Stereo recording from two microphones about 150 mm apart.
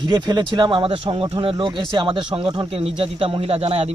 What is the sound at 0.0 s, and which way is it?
Speech, 30° right (ahead or behind).